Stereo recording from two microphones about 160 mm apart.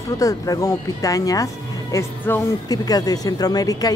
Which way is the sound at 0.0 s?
20° left (ahead or behind).